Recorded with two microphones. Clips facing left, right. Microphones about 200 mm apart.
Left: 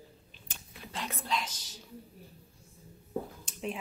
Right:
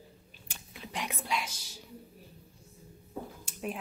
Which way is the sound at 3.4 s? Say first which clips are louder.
Even; 5° right (ahead or behind).